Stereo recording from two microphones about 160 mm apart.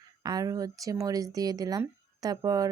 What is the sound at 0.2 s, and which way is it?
Speech, 20° right (ahead or behind).